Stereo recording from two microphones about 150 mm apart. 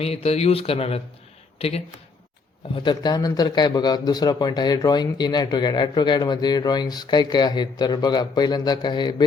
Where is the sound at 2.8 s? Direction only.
30° left (ahead or behind).